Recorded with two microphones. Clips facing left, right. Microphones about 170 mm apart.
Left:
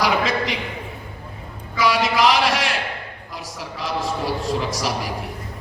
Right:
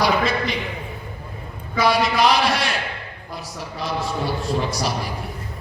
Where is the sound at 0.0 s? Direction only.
90° left.